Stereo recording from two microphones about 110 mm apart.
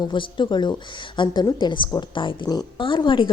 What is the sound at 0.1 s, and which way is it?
A woman's voice, 45° left (ahead or behind).